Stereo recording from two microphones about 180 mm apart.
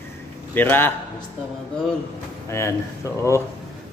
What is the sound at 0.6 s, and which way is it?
Speech, 10° left (ahead or behind).